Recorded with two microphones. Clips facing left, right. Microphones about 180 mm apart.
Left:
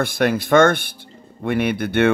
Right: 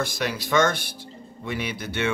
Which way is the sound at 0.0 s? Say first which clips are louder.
Left 8 dB; 55° left (ahead or behind).